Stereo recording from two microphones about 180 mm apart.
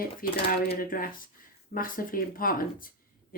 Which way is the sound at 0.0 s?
55° left (ahead or behind).